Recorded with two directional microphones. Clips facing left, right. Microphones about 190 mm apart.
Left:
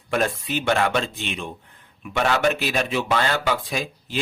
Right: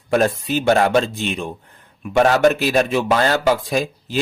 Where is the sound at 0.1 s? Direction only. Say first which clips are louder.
Right 6 dB; 40° right (ahead or behind).